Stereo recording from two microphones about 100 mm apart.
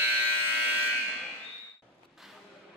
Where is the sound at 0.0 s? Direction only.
20° right (ahead or behind).